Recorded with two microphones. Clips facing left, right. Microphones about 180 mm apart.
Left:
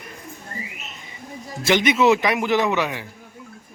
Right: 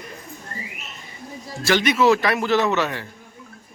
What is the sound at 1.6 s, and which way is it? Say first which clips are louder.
A man's voice: even; 20° left (ahead or behind).